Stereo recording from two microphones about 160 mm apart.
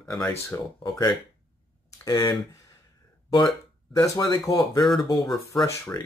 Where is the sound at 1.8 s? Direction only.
20° left (ahead or behind).